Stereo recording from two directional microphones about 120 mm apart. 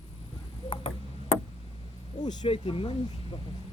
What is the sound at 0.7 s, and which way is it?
Tick-tock, 50° left (ahead or behind).